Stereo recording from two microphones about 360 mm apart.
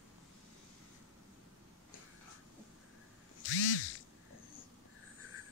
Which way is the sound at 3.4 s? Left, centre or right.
Left.